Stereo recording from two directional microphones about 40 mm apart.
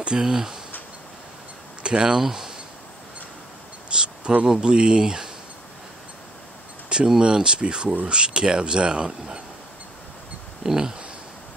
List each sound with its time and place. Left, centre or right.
0.0 s speech: centre
1.8 s speech: centre
3.9 s cricket: right
4.6 s speech: right
7.1 s speech: centre
10.6 s speech: centre